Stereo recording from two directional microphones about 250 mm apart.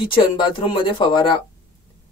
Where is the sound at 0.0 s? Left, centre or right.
Centre.